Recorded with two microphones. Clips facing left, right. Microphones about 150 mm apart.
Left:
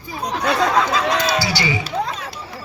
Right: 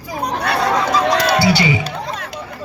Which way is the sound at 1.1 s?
65° right (ahead or behind).